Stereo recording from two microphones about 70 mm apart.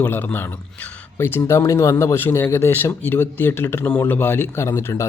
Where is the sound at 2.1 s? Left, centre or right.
Left.